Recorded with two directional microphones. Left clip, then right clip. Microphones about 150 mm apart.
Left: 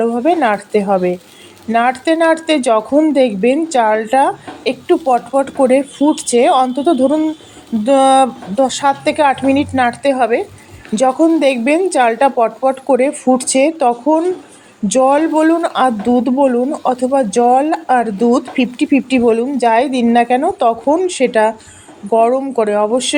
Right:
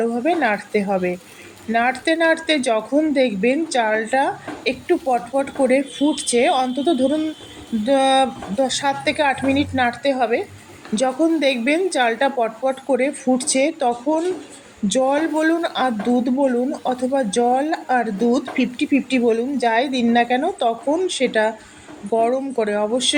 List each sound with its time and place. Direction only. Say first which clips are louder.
0.0 s speech: left 6 dB; 25° left (ahead or behind)